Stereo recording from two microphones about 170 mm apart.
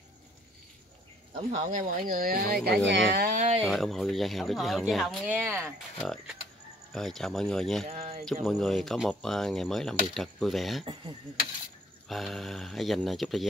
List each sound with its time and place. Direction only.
1.5 s speech: 45° right (ahead or behind)
2.9 s speech: 90° right
3.3 s speech: 40° right (ahead or behind)
3.6 s speech: centre (ahead or behind)
12.1 s speech: centre (ahead or behind)